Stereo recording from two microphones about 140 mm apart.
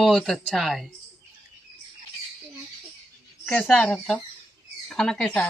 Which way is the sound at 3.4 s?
5° left (ahead or behind).